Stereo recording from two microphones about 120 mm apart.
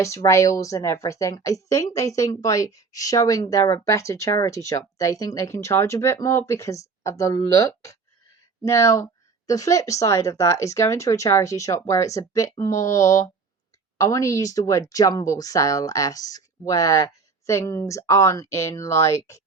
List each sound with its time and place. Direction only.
0.0 s a woman's voice: 25° left (ahead or behind)